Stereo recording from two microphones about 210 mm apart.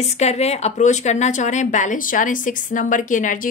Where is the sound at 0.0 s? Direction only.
30° left (ahead or behind).